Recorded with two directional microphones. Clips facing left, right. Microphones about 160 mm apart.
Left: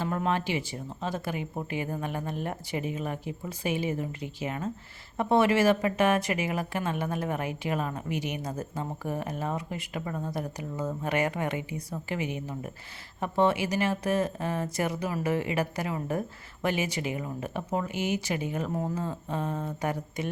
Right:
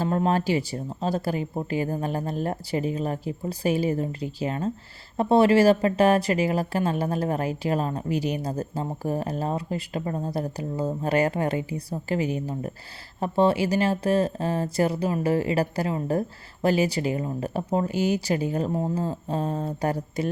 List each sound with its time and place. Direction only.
0.0 s speech: 35° right (ahead or behind)